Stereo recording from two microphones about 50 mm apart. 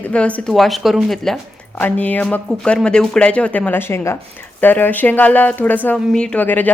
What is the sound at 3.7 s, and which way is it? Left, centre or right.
Speech, left.